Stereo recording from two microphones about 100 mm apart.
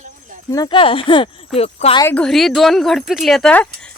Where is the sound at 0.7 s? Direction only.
60° left (ahead or behind).